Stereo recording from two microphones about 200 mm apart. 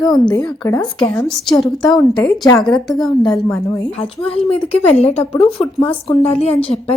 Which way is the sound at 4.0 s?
30° left (ahead or behind).